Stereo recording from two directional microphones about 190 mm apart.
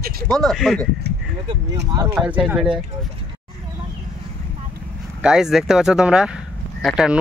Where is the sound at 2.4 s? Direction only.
5° right (ahead or behind).